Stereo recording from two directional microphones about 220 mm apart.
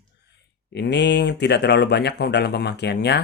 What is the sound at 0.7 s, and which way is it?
Speech, 50° left (ahead or behind).